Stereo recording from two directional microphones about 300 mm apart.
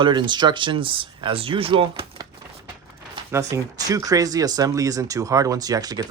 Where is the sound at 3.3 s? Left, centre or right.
Centre.